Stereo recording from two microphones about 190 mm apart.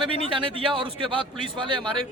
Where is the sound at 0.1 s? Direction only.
25° right (ahead or behind).